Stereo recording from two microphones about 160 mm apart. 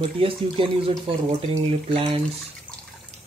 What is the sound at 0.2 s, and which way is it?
Speech, 35° right (ahead or behind).